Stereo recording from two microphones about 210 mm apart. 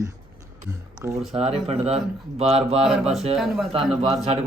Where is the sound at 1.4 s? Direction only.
30° right (ahead or behind).